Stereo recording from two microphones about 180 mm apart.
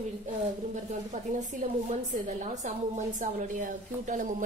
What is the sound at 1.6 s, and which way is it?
A woman's voice, 40° right (ahead or behind).